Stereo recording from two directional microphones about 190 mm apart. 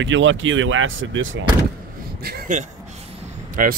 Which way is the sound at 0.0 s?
85° right.